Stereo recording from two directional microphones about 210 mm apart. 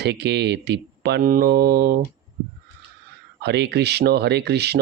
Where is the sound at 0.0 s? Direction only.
55° right (ahead or behind).